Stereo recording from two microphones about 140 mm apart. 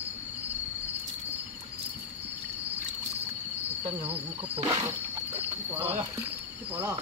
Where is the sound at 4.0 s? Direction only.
40° right (ahead or behind).